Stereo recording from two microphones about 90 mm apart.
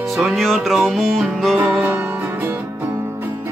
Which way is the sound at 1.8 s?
20° right (ahead or behind).